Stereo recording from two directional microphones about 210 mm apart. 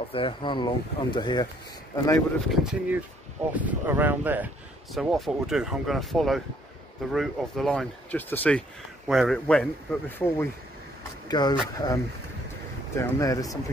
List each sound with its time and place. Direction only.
0.1 s speech: 25° left (ahead or behind)
2.5 s speech: 5° right (ahead or behind)
11.2 s speech: 20° left (ahead or behind)